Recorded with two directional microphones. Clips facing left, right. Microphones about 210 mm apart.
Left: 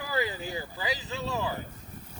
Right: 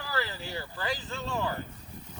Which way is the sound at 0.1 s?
15° left (ahead or behind).